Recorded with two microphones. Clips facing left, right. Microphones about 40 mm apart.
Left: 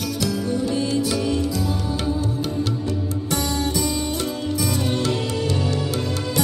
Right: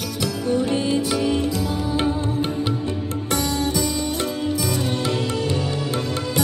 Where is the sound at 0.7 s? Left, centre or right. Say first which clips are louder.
Right 1 dB; right.